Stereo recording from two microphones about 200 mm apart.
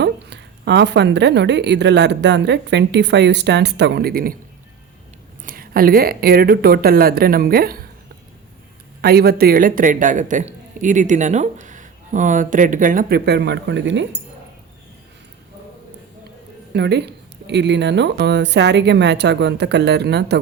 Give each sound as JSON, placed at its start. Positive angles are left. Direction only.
{"t": 0.0, "sound": "a woman's voice", "side_deg": -60}
{"t": 5.4, "sound": "speech", "side_deg": -45}
{"t": 9.0, "sound": "speech", "side_deg": -50}
{"t": 16.7, "sound": "a woman's voice", "side_deg": -55}